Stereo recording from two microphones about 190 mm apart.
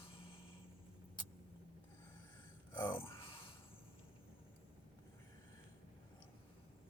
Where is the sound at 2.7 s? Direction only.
15° left (ahead or behind).